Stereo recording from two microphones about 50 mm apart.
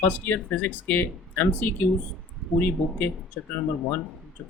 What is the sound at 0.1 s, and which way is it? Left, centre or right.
Speech, left.